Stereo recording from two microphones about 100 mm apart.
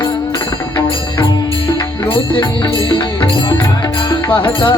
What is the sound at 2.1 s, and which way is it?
Music, 55° left (ahead or behind).